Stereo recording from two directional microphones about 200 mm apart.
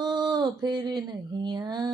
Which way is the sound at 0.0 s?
20° right (ahead or behind).